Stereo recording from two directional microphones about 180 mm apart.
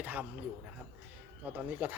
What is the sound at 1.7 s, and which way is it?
Speech, 10° right (ahead or behind).